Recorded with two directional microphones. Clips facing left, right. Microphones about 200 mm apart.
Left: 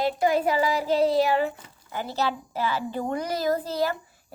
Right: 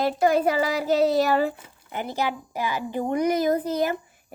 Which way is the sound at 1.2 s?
40° right (ahead or behind).